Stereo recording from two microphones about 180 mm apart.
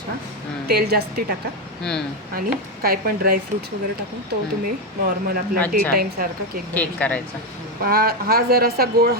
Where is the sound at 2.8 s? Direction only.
55° right (ahead or behind).